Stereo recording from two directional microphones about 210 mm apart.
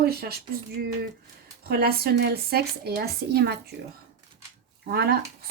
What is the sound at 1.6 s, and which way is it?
Speech, 50° right (ahead or behind).